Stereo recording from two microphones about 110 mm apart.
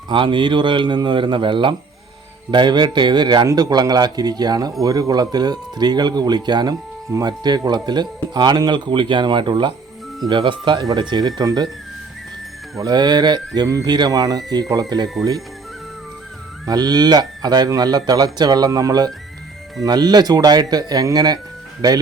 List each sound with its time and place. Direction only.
0.1 s speech: 50° right (ahead or behind)
12.8 s speech: 40° right (ahead or behind)
16.6 s speech: 35° right (ahead or behind)